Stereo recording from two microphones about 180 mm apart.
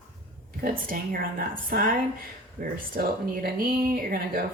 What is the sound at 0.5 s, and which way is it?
Speech, 55° right (ahead or behind).